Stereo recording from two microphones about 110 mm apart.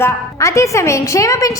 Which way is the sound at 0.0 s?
25° left (ahead or behind).